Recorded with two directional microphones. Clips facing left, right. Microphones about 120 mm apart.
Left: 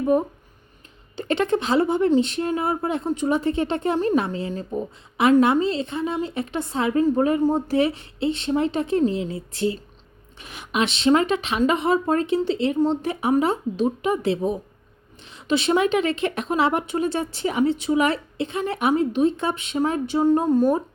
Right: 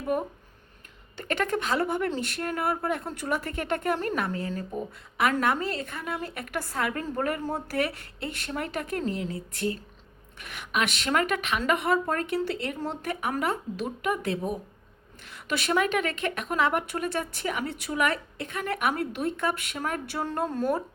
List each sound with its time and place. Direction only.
0.0 s speech: 25° left (ahead or behind)